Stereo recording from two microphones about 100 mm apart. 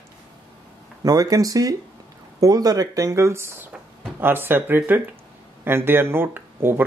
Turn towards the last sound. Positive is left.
turn(degrees=-20)  # may be behind; listen again after turning